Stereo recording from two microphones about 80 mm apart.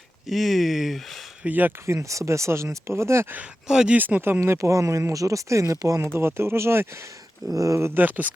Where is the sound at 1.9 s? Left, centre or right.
Right.